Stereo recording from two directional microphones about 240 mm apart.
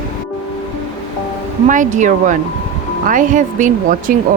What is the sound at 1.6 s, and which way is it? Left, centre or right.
Speech, right.